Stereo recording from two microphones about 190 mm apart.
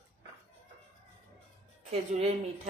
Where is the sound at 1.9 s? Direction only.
30° right (ahead or behind).